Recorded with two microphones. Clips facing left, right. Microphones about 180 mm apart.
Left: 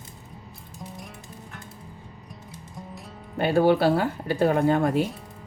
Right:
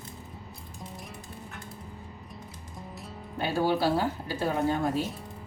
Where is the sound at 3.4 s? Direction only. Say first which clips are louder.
Left 7 dB; 60° left (ahead or behind).